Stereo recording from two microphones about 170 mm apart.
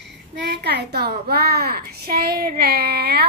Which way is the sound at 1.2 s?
65° right (ahead or behind).